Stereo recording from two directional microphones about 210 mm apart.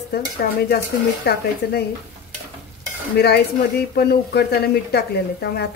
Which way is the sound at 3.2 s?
50° left (ahead or behind).